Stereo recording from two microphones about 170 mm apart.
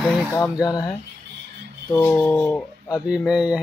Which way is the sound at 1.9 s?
10° left (ahead or behind).